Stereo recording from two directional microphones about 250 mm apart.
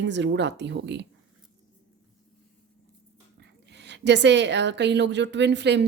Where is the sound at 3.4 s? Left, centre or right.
Right.